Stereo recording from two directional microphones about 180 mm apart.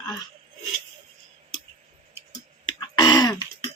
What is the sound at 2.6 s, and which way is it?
Throat clearing, 25° left (ahead or behind).